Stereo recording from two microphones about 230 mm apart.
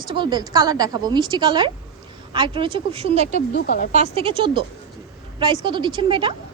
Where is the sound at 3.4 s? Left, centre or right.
Left.